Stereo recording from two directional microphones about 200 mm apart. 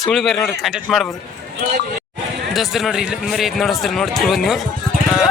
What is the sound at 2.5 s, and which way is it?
Speech, centre (ahead or behind).